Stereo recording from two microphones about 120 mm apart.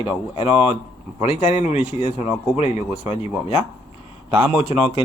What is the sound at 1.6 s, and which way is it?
Speech, 60° left (ahead or behind).